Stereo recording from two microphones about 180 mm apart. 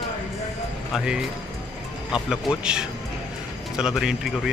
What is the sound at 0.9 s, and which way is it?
Speech, 5° right (ahead or behind).